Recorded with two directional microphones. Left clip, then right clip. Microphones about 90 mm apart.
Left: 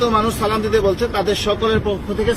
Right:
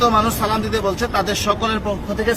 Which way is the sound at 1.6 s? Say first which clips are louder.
Left 3 dB; 70° right (ahead or behind).